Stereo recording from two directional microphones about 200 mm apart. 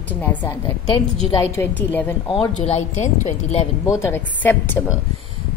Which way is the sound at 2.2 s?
25° left (ahead or behind).